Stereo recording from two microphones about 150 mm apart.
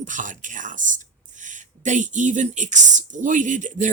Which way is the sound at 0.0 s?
60° right (ahead or behind).